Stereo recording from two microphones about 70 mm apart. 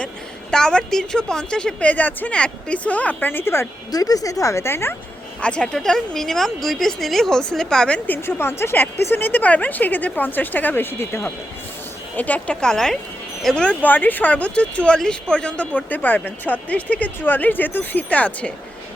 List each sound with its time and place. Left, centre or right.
0.5 s speech: centre; by 3.7 s left
3.9 s a woman's voice: left
5.4 s a woman's voice: centre; by 11.3 s left
12.1 s a woman's voice: left
12.5 s a woman's voice: centre
13.8 s a woman's voice: left